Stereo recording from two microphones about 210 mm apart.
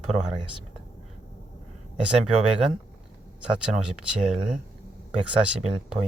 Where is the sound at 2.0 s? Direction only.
5° right (ahead or behind).